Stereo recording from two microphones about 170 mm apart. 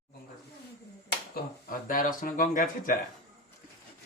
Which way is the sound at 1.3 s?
55° left (ahead or behind).